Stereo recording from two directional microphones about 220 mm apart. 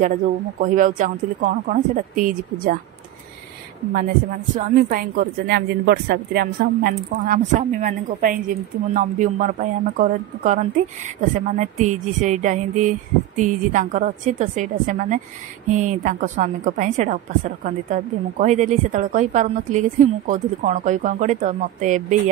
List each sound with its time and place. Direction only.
0.0 s a woman's voice: 35° right (ahead or behind)
4.6 s a woman's voice: 35° right (ahead or behind)